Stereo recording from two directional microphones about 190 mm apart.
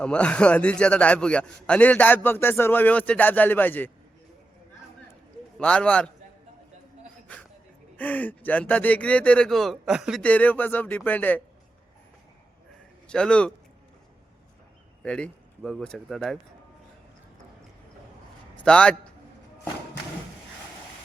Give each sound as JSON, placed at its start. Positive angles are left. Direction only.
{"t": 0.0, "sound": "a man's voice", "side_deg": 5}
{"t": 5.5, "sound": "speech", "side_deg": 5}
{"t": 7.9, "sound": "a man's voice", "side_deg": 10}
{"t": 13.1, "sound": "speech", "side_deg": 5}
{"t": 15.0, "sound": "speech", "side_deg": 5}
{"t": 18.6, "sound": "a man's voice", "side_deg": 5}